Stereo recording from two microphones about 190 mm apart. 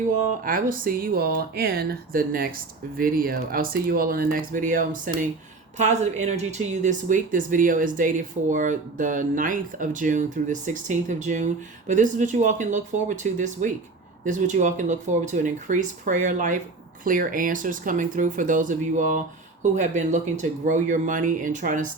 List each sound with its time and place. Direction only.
0.4 s speech: 45° right (ahead or behind)